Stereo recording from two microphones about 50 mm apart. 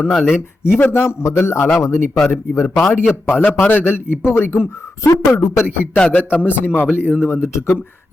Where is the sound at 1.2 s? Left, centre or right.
Left.